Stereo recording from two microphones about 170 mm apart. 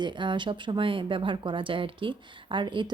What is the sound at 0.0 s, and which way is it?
Speech, 25° right (ahead or behind).